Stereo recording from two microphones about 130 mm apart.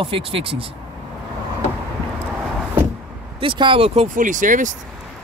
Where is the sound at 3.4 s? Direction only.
40° right (ahead or behind).